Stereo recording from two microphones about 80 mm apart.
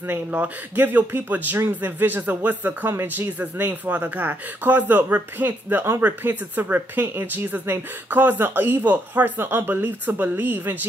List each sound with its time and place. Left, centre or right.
0.0 s speech: right